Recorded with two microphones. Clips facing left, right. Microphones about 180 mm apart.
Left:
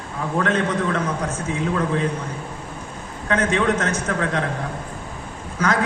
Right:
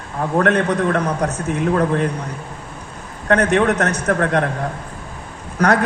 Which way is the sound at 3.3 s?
65° right (ahead or behind).